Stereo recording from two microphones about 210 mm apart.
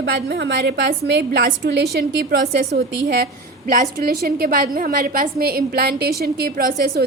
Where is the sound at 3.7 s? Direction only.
45° right (ahead or behind).